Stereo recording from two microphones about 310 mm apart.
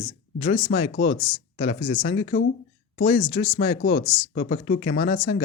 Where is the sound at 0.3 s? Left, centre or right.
Left.